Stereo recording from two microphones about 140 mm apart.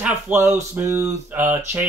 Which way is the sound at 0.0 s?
15° right (ahead or behind).